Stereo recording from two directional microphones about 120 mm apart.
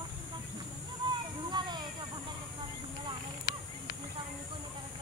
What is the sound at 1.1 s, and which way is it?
Children playing, 40° right (ahead or behind).